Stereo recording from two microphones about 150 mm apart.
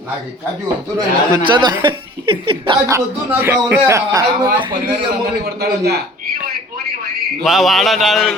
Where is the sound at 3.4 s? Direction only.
15° right (ahead or behind).